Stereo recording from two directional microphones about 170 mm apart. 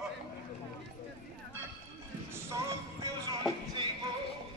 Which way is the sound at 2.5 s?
20° right (ahead or behind).